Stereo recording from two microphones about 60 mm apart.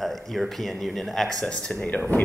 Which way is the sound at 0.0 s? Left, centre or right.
Centre.